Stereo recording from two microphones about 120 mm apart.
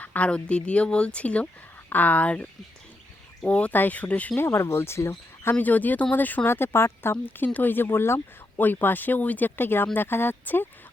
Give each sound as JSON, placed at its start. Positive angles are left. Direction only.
{"t": 0.0, "sound": "speech", "side_deg": 10}